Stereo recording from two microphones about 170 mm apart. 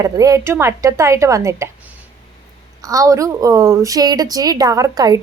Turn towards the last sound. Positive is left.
turn(degrees=-20)  # may be behind; listen again after turning